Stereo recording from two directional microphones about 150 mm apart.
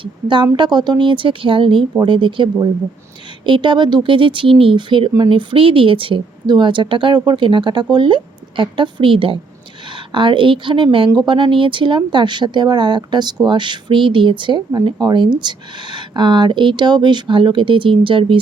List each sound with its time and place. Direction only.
0.0 s speech: 30° right (ahead or behind)